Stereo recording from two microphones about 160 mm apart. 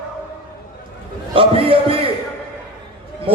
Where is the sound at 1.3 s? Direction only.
35° right (ahead or behind).